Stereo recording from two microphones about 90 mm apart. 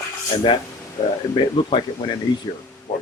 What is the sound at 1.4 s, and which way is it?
Speech, 65° left (ahead or behind).